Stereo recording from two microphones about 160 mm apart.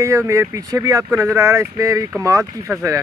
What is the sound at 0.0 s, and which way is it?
Speech, 20° right (ahead or behind).